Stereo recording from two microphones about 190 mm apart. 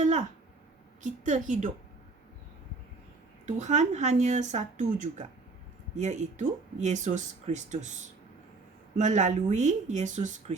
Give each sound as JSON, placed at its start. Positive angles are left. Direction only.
{"t": 0.0, "sound": "a sound", "side_deg": -40}
{"t": 1.0, "sound": "speech", "side_deg": -40}
{"t": 3.4, "sound": "speech", "side_deg": -40}
{"t": 9.0, "sound": "speech", "side_deg": -40}